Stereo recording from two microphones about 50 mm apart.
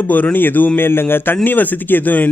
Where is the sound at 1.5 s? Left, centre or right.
Left.